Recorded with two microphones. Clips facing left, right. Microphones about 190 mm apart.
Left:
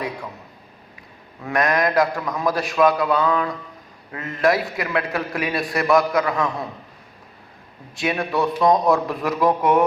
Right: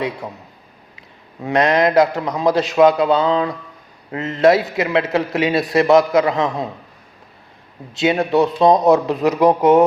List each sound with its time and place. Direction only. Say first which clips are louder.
1.4 s a man's voice: right 5 dB; 25° right (ahead or behind)
7.9 s a man's voice: right 7 dB; 25° right (ahead or behind)